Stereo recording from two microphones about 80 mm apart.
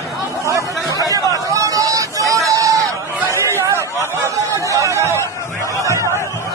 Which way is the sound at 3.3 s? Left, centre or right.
Right.